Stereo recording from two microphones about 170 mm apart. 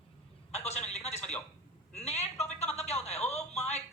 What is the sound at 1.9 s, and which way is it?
Speech, 40° left (ahead or behind).